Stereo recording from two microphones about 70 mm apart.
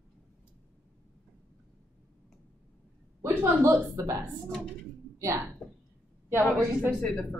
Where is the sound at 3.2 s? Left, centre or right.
Right.